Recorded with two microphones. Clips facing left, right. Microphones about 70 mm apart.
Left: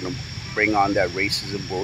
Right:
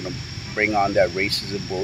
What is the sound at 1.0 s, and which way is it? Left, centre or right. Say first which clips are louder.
Speech: right 3 dB; centre.